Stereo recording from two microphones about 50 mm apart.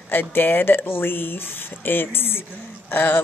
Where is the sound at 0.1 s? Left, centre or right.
Left.